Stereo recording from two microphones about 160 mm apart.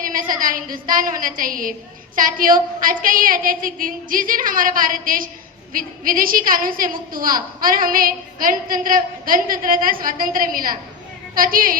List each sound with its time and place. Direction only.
0.0 s a woman's voice: 60° right (ahead or behind)